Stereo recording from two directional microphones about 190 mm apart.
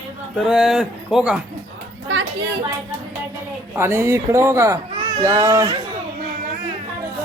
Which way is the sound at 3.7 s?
15° right (ahead or behind).